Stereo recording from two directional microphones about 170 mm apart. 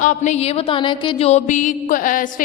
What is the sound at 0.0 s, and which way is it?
Speech, 45° left (ahead or behind).